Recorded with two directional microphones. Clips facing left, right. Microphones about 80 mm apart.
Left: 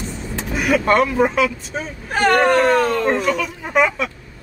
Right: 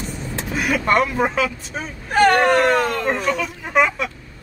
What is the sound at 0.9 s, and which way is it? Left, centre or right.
Speech, centre.